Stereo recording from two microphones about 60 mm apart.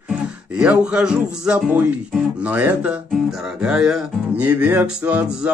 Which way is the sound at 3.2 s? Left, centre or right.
Centre.